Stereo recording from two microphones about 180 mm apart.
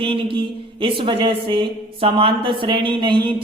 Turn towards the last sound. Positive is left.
turn(degrees=-25)  # may be behind; listen again after turning